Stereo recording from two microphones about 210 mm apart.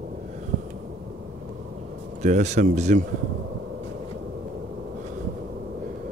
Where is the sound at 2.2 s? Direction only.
35° right (ahead or behind).